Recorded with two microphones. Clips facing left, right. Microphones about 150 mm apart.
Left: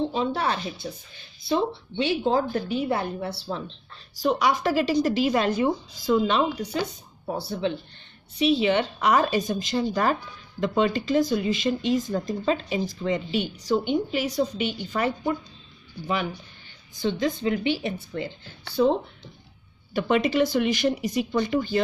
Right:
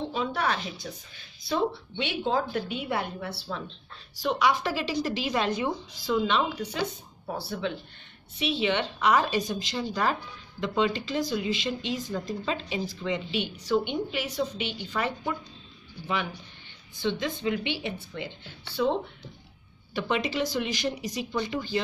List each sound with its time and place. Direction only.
0.1 s speech: 30° left (ahead or behind)
8.4 s speech: 40° left (ahead or behind)
16.9 s speech: 40° left (ahead or behind)
19.9 s speech: 50° left (ahead or behind)